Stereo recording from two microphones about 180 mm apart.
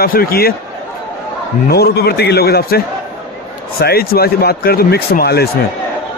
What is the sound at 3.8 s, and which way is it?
A man's voice, 60° left (ahead or behind).